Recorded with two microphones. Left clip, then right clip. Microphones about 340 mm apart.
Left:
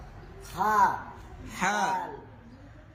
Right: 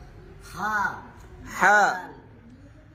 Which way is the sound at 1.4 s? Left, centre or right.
Centre.